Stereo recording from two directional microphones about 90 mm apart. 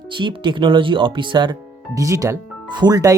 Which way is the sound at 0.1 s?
60° right (ahead or behind).